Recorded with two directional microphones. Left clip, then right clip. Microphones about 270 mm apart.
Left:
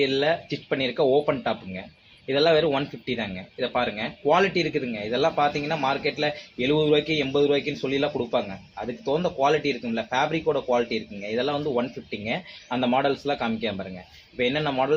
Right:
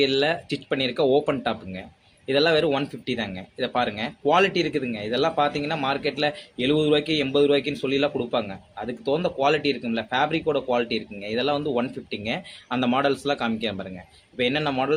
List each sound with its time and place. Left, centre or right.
0.0 s speech: centre